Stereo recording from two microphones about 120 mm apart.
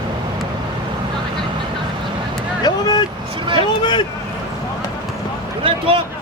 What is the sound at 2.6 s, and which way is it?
Speech, 35° left (ahead or behind).